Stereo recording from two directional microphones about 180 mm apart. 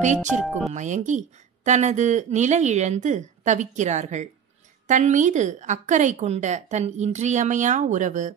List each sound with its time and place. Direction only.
0.4 s speech: centre (ahead or behind)
0.7 s speech: 40° right (ahead or behind)